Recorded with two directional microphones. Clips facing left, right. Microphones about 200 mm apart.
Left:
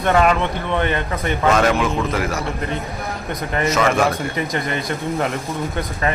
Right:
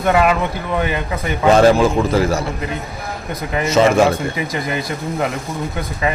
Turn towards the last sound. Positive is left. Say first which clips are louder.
# right 1 dB
turn(degrees=-5)  # may be behind; listen again after turning